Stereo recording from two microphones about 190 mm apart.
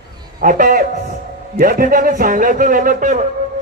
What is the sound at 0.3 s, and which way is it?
A man's voice, 45° right (ahead or behind).